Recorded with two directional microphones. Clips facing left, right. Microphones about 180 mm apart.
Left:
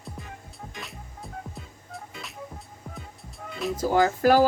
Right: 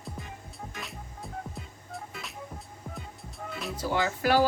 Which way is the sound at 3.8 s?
45° left (ahead or behind).